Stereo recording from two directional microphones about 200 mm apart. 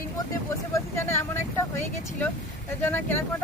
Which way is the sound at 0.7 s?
10° left (ahead or behind).